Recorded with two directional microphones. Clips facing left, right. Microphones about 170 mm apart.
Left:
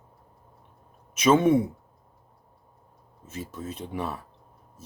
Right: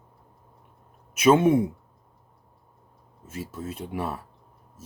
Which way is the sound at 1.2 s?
10° right (ahead or behind).